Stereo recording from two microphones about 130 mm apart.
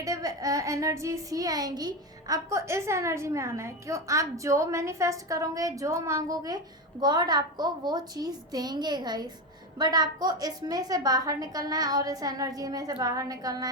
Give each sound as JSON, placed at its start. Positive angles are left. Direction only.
{"t": 0.0, "sound": "a child's voice", "side_deg": -25}